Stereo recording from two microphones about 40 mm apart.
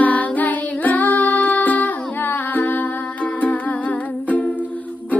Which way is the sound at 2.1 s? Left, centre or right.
Left.